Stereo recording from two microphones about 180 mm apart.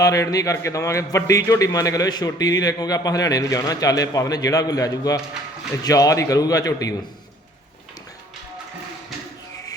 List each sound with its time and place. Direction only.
0.0 s a man's voice: 20° left (ahead or behind)